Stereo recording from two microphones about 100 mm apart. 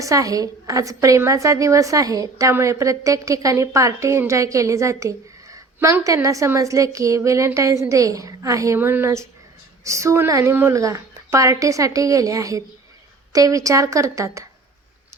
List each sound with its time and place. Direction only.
0.0 s a woman's voice: 35° right (ahead or behind)
10.8 s a woman's voice: 30° right (ahead or behind)